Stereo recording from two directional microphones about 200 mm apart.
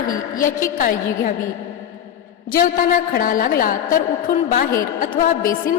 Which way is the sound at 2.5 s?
45° left (ahead or behind).